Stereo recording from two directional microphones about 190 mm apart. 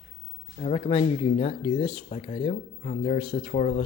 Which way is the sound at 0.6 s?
30° left (ahead or behind).